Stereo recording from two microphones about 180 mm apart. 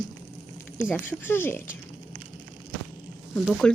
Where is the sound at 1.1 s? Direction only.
15° left (ahead or behind).